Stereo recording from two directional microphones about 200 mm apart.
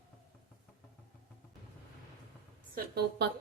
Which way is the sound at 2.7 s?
55° right (ahead or behind).